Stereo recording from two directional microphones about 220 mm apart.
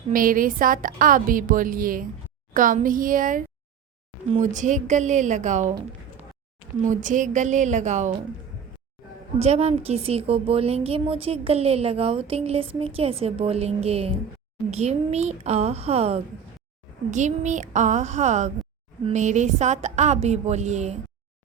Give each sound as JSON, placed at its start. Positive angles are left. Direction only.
{"t": 0.1, "sound": "a woman's voice", "side_deg": -40}
{"t": 6.8, "sound": "a woman's voice", "side_deg": -35}
{"t": 9.4, "sound": "a woman's voice", "side_deg": -30}